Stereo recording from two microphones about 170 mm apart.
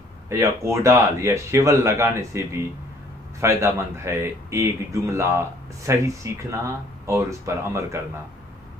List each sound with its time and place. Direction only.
0.3 s a man's voice: 15° right (ahead or behind)